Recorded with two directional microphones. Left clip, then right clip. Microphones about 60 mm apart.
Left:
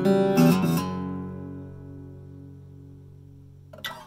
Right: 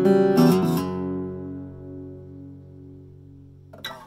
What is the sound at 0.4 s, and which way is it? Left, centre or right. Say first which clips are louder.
Music: right 3 dB; right.